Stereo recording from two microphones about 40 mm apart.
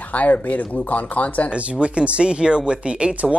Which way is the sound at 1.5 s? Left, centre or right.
Right.